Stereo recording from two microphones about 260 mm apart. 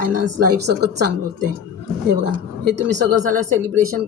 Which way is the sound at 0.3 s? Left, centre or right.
Right.